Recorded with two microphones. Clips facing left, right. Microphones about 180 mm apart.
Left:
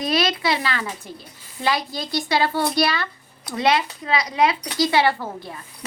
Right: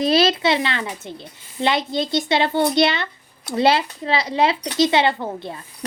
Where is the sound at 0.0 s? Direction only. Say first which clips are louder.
Right 5 dB; 30° right (ahead or behind).